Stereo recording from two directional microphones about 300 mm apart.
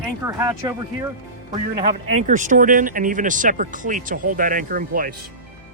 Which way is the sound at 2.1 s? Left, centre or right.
Right.